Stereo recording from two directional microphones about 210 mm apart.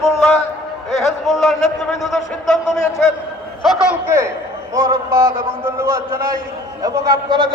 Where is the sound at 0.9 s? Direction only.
Centre (ahead or behind).